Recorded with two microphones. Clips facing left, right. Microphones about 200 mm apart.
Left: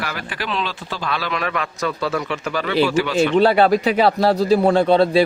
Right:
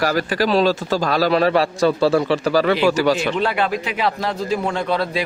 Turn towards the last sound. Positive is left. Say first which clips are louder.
# left 7 dB
turn(degrees=30)  # may be behind; listen again after turning